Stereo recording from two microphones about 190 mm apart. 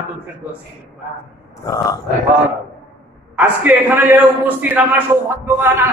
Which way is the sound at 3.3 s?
10° right (ahead or behind).